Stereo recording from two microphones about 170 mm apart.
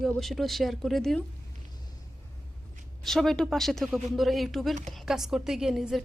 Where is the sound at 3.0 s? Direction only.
Centre (ahead or behind).